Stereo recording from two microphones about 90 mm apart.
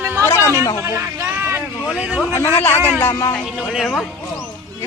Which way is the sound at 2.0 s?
15° right (ahead or behind).